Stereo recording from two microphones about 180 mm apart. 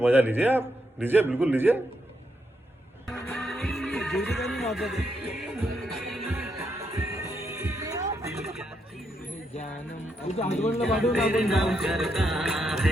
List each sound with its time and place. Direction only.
0.0 s a man's voice: 10° right (ahead or behind)
3.1 s music: centre (ahead or behind)
6.3 s music: 15° right (ahead or behind)
8.4 s a sound: centre (ahead or behind)
10.2 s speech: 35° left (ahead or behind)
10.8 s music: centre (ahead or behind)